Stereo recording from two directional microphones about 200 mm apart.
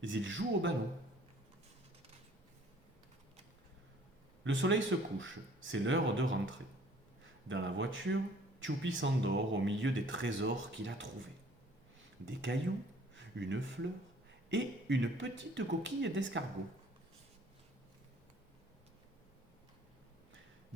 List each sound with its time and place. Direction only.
0.0 s speech: 65° right (ahead or behind)
4.4 s speech: 65° right (ahead or behind)
12.2 s speech: 65° right (ahead or behind)
13.1 s a sound: 65° right (ahead or behind)
14.5 s speech: 65° right (ahead or behind)